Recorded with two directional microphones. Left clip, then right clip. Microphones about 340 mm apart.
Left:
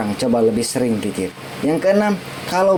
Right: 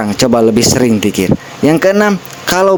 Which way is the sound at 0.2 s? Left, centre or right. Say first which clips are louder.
Right 8 dB; right.